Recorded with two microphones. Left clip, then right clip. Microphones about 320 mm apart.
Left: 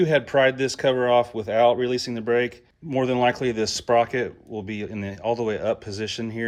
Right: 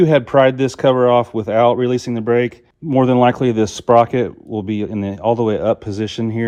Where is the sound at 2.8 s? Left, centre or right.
Right.